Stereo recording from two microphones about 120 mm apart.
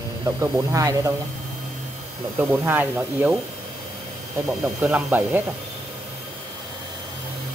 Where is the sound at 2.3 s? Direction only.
20° right (ahead or behind).